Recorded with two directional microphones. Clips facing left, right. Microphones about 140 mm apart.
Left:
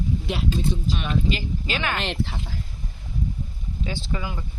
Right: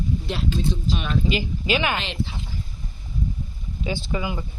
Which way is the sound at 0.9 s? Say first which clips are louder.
Right 2 dB; 5° right (ahead or behind).